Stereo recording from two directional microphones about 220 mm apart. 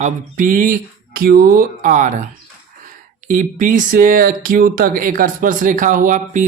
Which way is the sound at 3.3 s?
40° right (ahead or behind).